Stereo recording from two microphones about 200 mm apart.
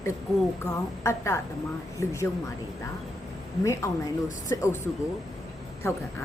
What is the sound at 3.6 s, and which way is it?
A woman's voice, 15° left (ahead or behind).